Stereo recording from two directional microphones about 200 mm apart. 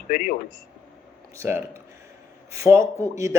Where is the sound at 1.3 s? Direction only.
15° right (ahead or behind).